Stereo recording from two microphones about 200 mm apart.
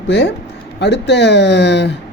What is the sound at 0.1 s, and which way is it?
A woman's voice, 60° left (ahead or behind).